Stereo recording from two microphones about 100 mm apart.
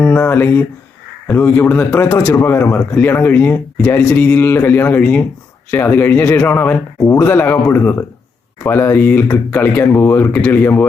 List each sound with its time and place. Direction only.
0.0 s speech: 20° left (ahead or behind)